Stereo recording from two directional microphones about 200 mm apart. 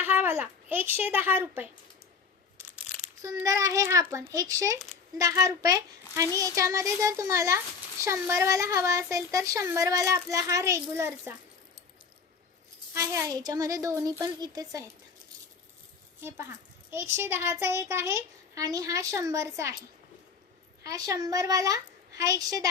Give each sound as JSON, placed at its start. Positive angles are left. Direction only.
{"t": 0.0, "sound": "a child's voice", "side_deg": -10}
{"t": 2.7, "sound": "a child's voice", "side_deg": -10}
{"t": 12.9, "sound": "speech", "side_deg": -15}
{"t": 16.9, "sound": "speech", "side_deg": -10}
{"t": 20.8, "sound": "speech", "side_deg": -15}